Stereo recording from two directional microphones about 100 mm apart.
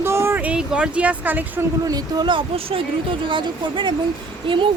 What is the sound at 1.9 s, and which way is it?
Speech, 45° right (ahead or behind).